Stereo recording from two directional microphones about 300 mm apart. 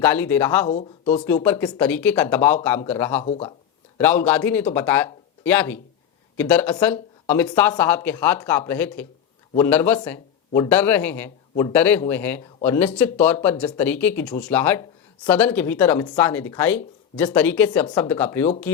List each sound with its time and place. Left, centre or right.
0.0 s speech: centre
3.2 s speech: centre
3.9 s speech: centre